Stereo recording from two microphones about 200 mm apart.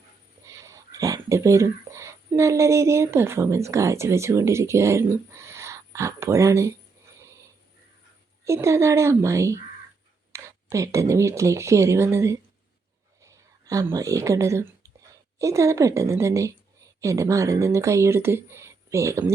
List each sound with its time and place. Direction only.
0.4 s speech: 15° right (ahead or behind)
8.4 s speech: 15° right (ahead or behind)